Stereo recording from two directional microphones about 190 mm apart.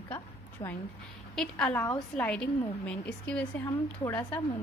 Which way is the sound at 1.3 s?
5° left (ahead or behind).